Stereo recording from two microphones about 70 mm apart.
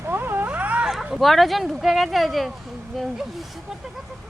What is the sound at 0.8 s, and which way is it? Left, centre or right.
Speech, centre.